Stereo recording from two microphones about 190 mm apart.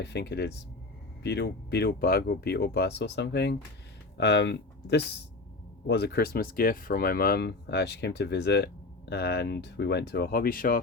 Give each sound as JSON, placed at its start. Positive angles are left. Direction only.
{"t": 0.0, "sound": "speech", "side_deg": 60}